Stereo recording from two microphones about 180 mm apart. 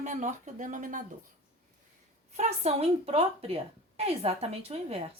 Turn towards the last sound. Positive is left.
turn(degrees=-35)  # may be behind; listen again after turning